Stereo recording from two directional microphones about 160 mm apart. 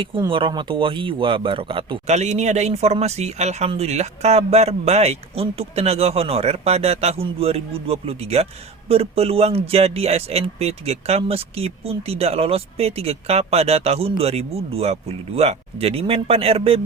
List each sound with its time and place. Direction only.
0.3 s speech: 35° right (ahead or behind)
2.0 s speech: 45° right (ahead or behind)